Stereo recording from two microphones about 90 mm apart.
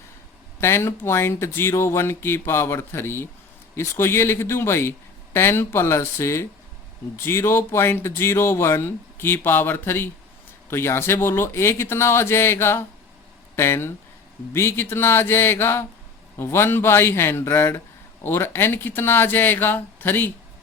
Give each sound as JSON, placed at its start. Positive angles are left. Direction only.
{"t": 0.6, "sound": "speech", "side_deg": 30}